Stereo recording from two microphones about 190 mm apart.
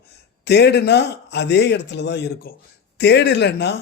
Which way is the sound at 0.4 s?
60° left (ahead or behind).